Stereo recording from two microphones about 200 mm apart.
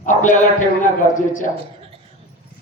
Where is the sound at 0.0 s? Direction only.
40° left (ahead or behind).